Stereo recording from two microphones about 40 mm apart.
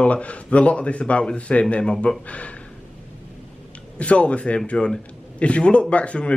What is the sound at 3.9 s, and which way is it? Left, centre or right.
A man's voice, left.